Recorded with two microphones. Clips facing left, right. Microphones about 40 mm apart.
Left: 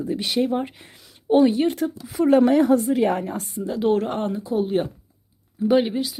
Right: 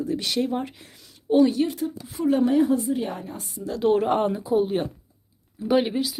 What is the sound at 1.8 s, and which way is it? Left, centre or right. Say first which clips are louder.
Speech: left 5 dB; left.